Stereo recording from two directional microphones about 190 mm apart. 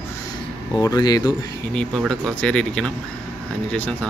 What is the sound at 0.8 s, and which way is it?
Speech, 20° left (ahead or behind).